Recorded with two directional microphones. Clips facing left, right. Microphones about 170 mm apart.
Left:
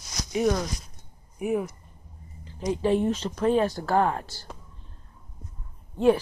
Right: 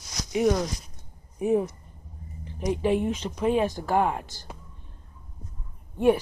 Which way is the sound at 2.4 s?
15° right (ahead or behind).